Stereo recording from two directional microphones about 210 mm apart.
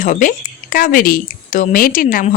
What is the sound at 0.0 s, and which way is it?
Speech, 40° left (ahead or behind).